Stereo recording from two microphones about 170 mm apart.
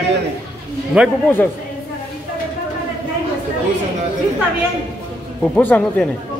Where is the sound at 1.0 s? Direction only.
5° right (ahead or behind).